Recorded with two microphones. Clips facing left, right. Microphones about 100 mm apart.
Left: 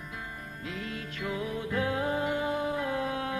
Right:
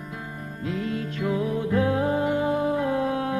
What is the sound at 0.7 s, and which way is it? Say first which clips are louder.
Music: right 10 dB; 35° right (ahead or behind).